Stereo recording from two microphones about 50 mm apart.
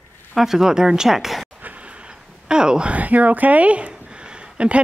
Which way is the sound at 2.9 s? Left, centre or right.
Right.